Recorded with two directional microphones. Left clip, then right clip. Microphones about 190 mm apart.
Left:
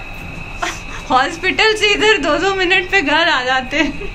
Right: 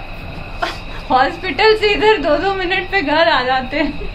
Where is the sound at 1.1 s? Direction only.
5° right (ahead or behind).